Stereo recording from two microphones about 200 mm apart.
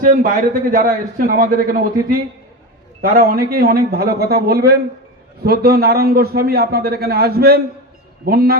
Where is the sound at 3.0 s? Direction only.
50° right (ahead or behind).